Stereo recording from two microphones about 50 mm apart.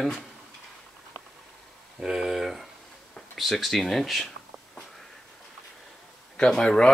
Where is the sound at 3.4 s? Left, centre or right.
Centre.